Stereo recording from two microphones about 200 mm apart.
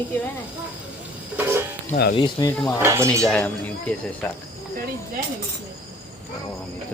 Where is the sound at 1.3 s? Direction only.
10° right (ahead or behind).